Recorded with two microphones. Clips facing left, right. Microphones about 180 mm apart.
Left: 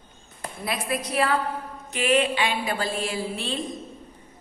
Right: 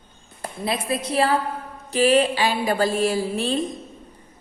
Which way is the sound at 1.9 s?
35° right (ahead or behind).